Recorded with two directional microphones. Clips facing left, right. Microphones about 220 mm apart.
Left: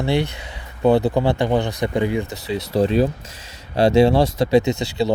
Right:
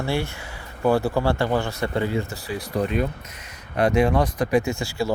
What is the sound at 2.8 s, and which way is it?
Speech, 30° left (ahead or behind).